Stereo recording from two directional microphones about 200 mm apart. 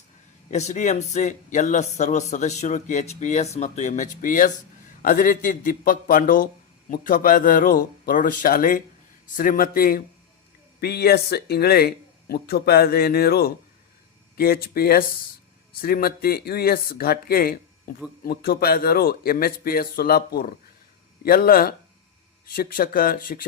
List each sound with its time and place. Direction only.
0.5 s speech: 35° left (ahead or behind)